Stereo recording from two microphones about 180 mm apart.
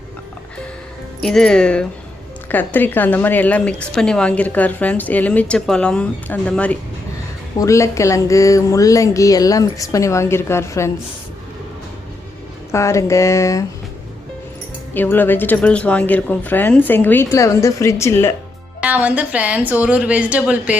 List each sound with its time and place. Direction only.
1.2 s a woman's voice: 5° left (ahead or behind)
12.7 s a woman's voice: 15° left (ahead or behind)
14.9 s a woman's voice: 10° left (ahead or behind)
18.8 s a woman's voice: 5° right (ahead or behind)